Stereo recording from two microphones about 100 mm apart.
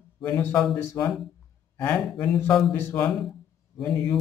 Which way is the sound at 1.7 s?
20° left (ahead or behind).